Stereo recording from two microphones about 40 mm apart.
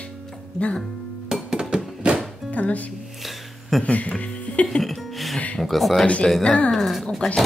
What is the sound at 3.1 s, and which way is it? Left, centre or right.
Music, centre.